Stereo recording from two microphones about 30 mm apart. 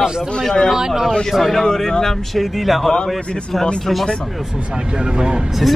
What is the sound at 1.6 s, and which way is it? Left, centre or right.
Speech, left.